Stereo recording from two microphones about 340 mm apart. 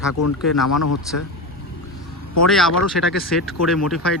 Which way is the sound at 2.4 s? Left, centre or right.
Centre.